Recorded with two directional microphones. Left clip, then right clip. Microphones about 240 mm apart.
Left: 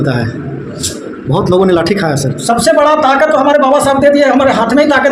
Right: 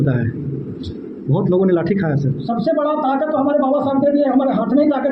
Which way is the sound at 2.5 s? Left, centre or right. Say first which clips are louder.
Left 10 dB; left.